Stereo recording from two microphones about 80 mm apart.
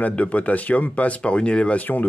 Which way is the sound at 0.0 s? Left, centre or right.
Centre.